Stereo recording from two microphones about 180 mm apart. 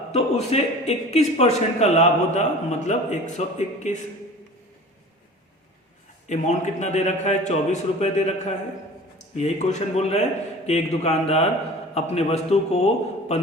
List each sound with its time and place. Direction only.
0.1 s a man's voice: 35° left (ahead or behind)
6.2 s a man's voice: 40° left (ahead or behind)